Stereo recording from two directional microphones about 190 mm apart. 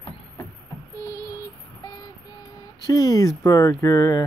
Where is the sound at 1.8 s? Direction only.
20° left (ahead or behind).